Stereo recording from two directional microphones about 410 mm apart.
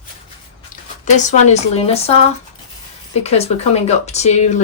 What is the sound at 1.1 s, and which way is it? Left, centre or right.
A woman's voice, centre.